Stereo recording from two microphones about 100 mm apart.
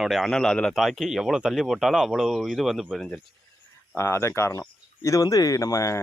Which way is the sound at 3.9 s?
25° left (ahead or behind).